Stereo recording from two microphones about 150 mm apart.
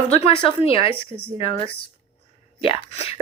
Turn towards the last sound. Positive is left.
turn(degrees=40)  # may be behind; listen again after turning